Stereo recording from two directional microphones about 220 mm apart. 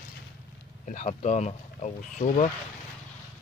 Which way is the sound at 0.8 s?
35° left (ahead or behind).